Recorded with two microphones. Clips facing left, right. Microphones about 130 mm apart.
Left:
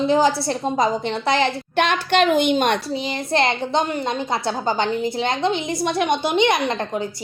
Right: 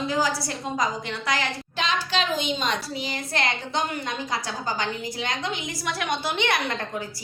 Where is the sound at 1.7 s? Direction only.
60° left (ahead or behind).